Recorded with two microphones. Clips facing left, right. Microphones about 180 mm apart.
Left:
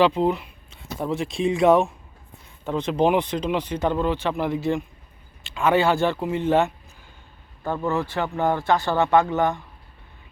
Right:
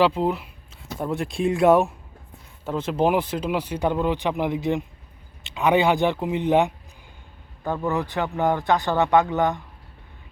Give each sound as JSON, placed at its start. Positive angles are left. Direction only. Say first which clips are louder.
{"t": 0.0, "sound": "speech", "louder": "left 1 dB", "side_deg": -5}